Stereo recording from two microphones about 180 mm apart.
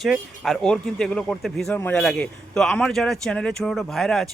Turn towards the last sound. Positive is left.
turn(degrees=0)  # may be behind; listen again after turning